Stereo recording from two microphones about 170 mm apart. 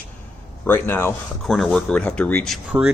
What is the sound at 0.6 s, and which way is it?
Speech, 10° left (ahead or behind).